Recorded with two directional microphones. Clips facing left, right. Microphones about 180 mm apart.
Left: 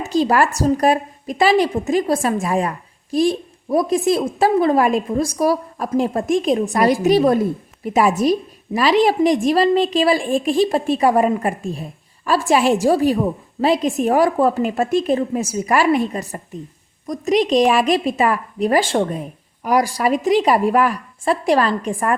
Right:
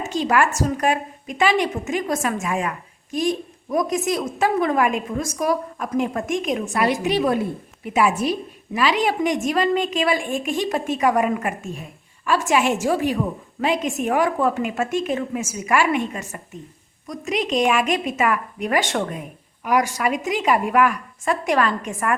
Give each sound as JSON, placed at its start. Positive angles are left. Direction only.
{"t": 0.0, "sound": "a woman's voice", "side_deg": 35}